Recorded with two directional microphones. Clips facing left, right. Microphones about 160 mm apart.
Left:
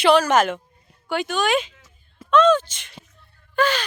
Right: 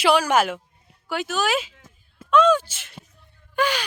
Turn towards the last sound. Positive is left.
turn(degrees=-10)  # may be behind; listen again after turning